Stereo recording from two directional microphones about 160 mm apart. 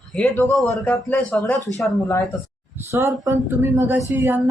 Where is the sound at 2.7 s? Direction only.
15° right (ahead or behind).